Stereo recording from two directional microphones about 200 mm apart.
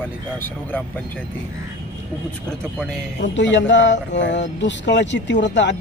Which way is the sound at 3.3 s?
65° left (ahead or behind).